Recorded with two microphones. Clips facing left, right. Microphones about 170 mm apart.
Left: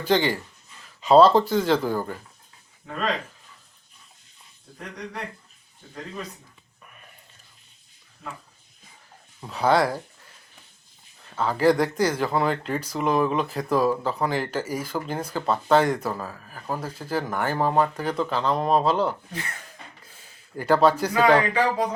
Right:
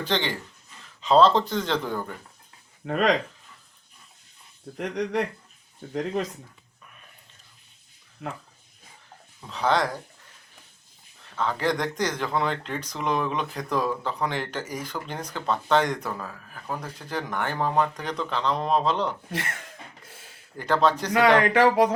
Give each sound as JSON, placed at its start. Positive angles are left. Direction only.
{"t": 0.0, "sound": "speech", "side_deg": 10}
{"t": 2.8, "sound": "speech", "side_deg": -70}
{"t": 4.8, "sound": "speech", "side_deg": -90}
{"t": 8.2, "sound": "speech", "side_deg": -65}
{"t": 9.4, "sound": "speech", "side_deg": 10}
{"t": 11.3, "sound": "speech", "side_deg": 5}
{"t": 20.6, "sound": "speech", "side_deg": 10}
{"t": 21.5, "sound": "speech", "side_deg": -80}